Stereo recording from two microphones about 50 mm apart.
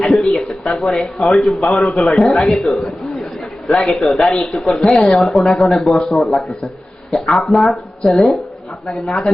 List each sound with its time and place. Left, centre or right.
0.2 s speech: centre
2.8 s chatter: centre
3.7 s speech: centre
4.9 s speech: centre
5.1 s speech: centre